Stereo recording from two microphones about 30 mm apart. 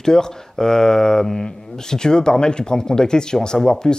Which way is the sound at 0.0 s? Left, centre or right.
Left.